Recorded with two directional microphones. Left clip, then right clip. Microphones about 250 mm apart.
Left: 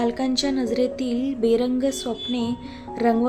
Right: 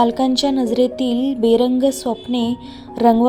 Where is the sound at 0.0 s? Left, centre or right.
Centre.